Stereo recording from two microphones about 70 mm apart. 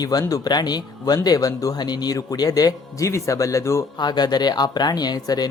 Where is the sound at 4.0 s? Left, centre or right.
Left.